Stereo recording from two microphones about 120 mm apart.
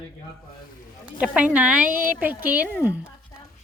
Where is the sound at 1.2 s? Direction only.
10° right (ahead or behind).